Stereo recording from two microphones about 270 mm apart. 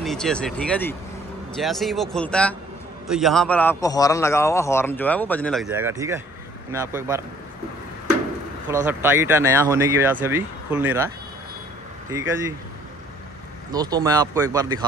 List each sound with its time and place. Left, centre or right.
0.0 s a man's voice: centre
8.8 s speech: centre
12.1 s speech: centre
13.7 s speech: centre